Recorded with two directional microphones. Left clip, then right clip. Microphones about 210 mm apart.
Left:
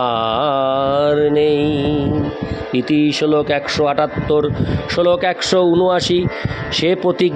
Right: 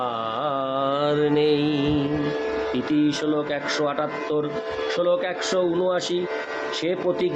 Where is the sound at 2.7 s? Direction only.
40° left (ahead or behind).